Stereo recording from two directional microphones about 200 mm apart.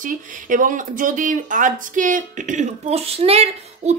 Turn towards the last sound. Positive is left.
turn(degrees=-30)  # may be behind; listen again after turning